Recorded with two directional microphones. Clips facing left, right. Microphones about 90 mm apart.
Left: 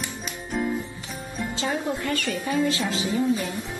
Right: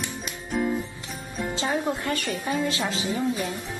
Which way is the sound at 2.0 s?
30° right (ahead or behind).